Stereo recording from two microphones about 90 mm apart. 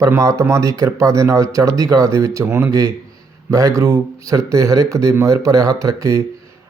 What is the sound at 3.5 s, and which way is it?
A man's voice, 40° right (ahead or behind).